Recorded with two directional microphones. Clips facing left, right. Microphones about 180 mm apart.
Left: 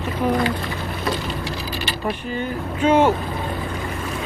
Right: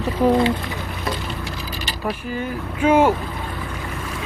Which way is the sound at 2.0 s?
5° right (ahead or behind).